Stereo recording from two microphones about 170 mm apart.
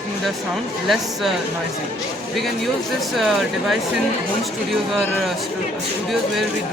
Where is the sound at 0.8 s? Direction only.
Centre (ahead or behind).